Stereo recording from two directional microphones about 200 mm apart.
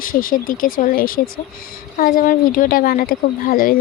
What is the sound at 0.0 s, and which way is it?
A child's voice, 45° left (ahead or behind).